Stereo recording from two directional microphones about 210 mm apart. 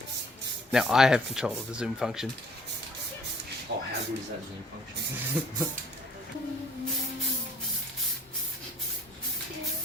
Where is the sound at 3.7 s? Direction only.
45° right (ahead or behind).